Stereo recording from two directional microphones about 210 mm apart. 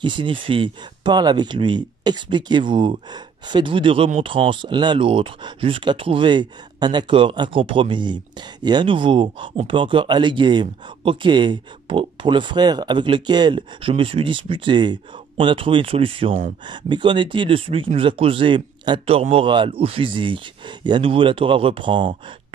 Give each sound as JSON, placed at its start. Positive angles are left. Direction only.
{"t": 0.0, "sound": "speech", "side_deg": -25}